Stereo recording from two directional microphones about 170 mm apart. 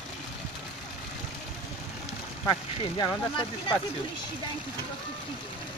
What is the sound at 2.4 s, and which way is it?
Speech, 25° left (ahead or behind).